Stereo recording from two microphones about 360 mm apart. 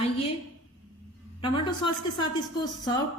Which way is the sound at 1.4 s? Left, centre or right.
Centre.